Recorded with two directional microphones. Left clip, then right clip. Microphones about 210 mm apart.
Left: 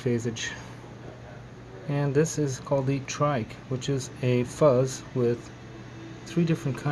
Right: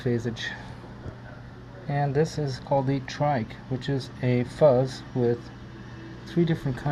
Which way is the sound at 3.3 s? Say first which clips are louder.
Right 1 dB; 65° left (ahead or behind).